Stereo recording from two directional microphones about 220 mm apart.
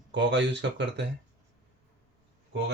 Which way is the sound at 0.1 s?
55° right (ahead or behind).